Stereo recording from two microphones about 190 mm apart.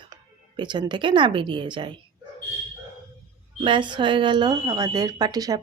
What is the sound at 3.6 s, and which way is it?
Speech, 25° right (ahead or behind).